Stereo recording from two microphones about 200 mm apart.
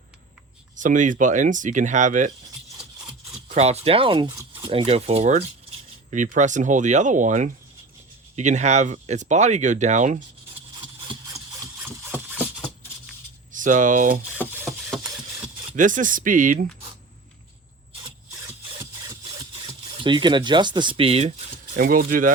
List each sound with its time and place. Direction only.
0.8 s speech: 40° right (ahead or behind)
3.5 s speech: 30° right (ahead or behind)
11.1 s engine: 15° right (ahead or behind)
13.5 s speech: 40° right (ahead or behind)
14.8 s a sound: centre (ahead or behind)
15.7 s speech: 40° right (ahead or behind)
19.6 s speech: 25° right (ahead or behind)
21.8 s speech: 45° right (ahead or behind)